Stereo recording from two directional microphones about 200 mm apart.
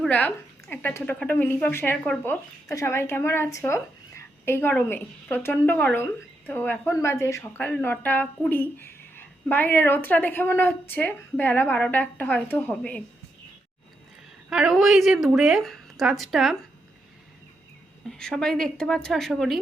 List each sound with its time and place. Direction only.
0.0 s a woman's voice: 5° left (ahead or behind)
14.5 s a woman's voice: 5° right (ahead or behind)
18.2 s a woman's voice: 5° left (ahead or behind)